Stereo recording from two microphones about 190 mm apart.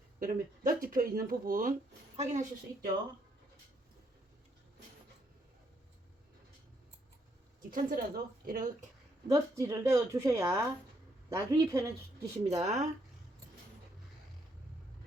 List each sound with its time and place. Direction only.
0.2 s a woman's voice: 45° right (ahead or behind)
7.7 s a woman's voice: 50° right (ahead or behind)
9.3 s a woman's voice: 15° right (ahead or behind)
12.5 s a woman's voice: 35° right (ahead or behind)